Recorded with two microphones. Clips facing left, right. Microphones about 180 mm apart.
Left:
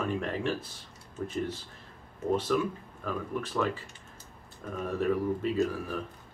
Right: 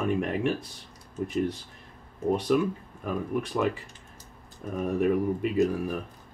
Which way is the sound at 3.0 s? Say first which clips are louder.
Right 4 dB; 15° right (ahead or behind).